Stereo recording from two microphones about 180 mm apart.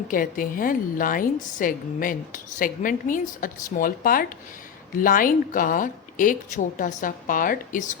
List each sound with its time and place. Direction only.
0.1 s a woman's voice: 50° left (ahead or behind)